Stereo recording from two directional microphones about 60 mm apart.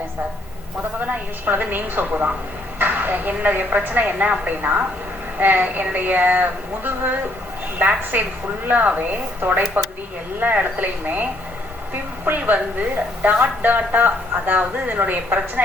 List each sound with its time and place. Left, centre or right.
1.0 s a woman's voice: right